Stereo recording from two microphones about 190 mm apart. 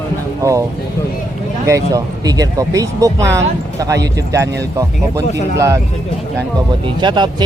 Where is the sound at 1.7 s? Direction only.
15° right (ahead or behind).